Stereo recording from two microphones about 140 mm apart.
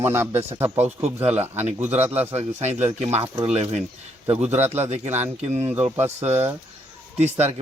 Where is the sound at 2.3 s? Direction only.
50° right (ahead or behind).